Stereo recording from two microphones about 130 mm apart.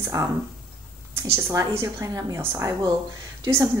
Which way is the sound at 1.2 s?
20° right (ahead or behind).